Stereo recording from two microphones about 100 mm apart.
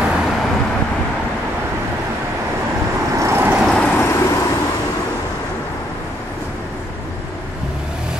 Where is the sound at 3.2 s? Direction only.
25° right (ahead or behind).